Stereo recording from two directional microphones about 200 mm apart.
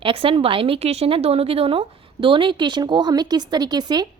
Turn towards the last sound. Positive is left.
turn(degrees=-20)  # may be behind; listen again after turning